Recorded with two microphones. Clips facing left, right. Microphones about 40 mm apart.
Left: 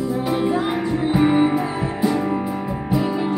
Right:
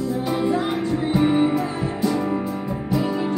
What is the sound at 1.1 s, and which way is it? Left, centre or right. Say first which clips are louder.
Music: left 2 dB; centre.